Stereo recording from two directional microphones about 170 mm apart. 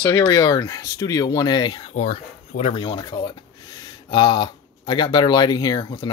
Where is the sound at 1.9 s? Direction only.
45° left (ahead or behind).